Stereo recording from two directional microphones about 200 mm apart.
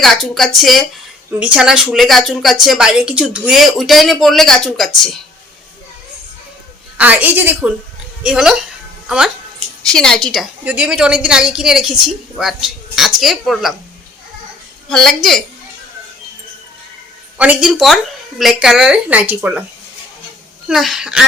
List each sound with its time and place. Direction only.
0.0 s a woman's voice: centre (ahead or behind)
6.9 s a woman's voice: 10° right (ahead or behind)
14.8 s a woman's voice: centre (ahead or behind)
17.3 s a woman's voice: 5° right (ahead or behind)
20.7 s a woman's voice: centre (ahead or behind)